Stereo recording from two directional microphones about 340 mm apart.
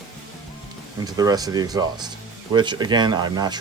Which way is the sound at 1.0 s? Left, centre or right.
Centre.